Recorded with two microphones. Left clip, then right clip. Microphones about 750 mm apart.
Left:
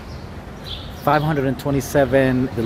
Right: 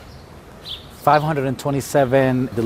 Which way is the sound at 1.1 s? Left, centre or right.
Right.